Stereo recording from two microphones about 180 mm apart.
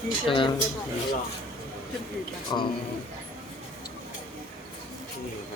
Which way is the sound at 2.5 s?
20° left (ahead or behind).